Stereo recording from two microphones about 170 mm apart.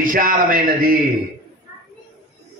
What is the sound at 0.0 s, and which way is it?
A man's voice, 55° right (ahead or behind).